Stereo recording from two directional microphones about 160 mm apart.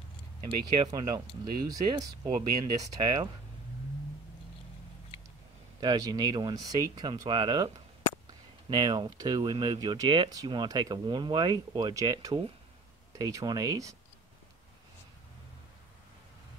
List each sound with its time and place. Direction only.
0.7 s speech: 25° right (ahead or behind)
5.8 s speech: 25° right (ahead or behind)